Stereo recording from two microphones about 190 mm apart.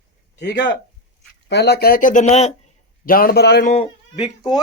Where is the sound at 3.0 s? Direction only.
50° left (ahead or behind).